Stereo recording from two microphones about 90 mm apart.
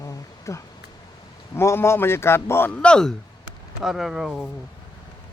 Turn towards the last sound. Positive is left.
turn(degrees=-5)  # may be behind; listen again after turning